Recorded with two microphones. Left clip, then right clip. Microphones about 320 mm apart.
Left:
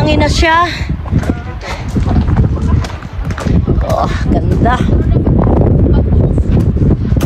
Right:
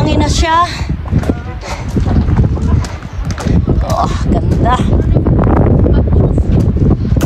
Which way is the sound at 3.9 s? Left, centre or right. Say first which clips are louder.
Left 1 dB; centre.